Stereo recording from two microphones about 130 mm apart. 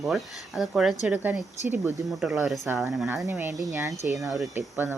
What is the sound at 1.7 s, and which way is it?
Speech, 20° right (ahead or behind).